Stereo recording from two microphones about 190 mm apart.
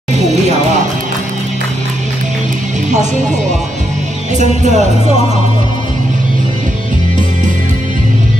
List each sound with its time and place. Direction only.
2.9 s music: 40° right (ahead or behind)
4.4 s music: 40° right (ahead or behind)